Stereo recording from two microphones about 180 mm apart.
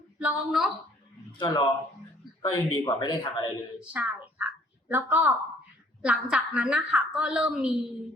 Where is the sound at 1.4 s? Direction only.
25° left (ahead or behind).